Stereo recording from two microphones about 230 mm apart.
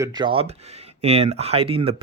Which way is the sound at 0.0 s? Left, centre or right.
Centre.